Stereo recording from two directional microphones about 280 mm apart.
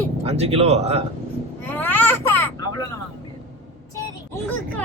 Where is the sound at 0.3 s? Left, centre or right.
Right.